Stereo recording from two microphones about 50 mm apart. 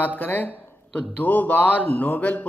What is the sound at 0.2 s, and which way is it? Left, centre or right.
Speech, left.